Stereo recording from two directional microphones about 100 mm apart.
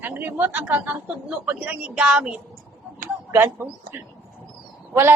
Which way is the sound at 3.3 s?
20° right (ahead or behind).